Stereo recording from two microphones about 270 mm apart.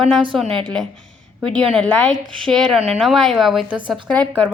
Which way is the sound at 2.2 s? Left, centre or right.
Centre.